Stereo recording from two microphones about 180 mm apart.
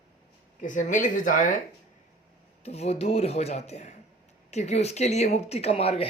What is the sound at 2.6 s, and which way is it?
Speech, 35° left (ahead or behind).